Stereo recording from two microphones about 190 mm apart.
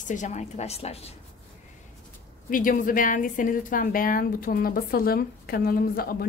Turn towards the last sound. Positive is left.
turn(degrees=50)  # may be behind; listen again after turning